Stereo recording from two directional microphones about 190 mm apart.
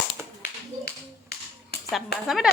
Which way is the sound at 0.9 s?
55° left (ahead or behind).